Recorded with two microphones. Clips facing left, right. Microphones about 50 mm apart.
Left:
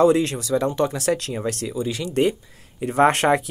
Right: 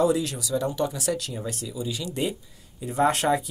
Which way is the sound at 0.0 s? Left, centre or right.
Left.